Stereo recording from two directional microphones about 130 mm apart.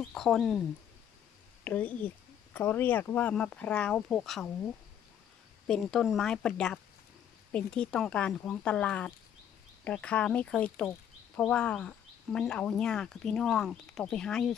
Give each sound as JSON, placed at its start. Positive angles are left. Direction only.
{"t": 0.0, "sound": "speech", "side_deg": 5}
{"t": 1.6, "sound": "speech", "side_deg": 10}
{"t": 5.7, "sound": "speech", "side_deg": 5}